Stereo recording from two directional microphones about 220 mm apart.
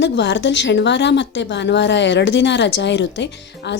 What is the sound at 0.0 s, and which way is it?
A woman's voice, 55° left (ahead or behind).